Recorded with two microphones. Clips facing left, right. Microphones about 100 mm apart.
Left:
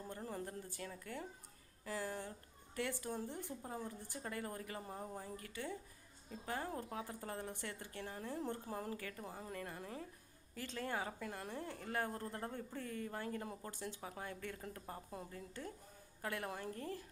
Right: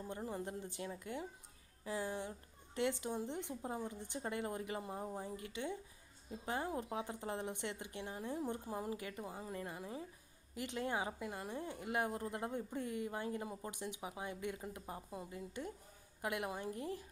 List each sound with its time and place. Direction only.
0.1 s a woman's voice: 15° right (ahead or behind)
9.0 s a woman's voice: 20° right (ahead or behind)
9.2 s a woman's voice: 5° right (ahead or behind)
10.5 s a woman's voice: 15° right (ahead or behind)